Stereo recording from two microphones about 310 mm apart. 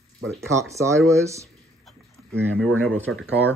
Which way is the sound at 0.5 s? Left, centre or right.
Centre.